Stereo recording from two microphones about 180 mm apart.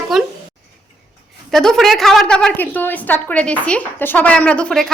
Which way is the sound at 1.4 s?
Centre (ahead or behind).